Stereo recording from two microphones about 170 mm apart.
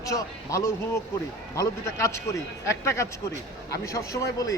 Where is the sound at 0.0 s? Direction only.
20° left (ahead or behind).